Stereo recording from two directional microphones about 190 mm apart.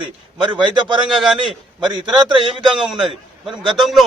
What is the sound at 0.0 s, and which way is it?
A man's voice, 25° right (ahead or behind).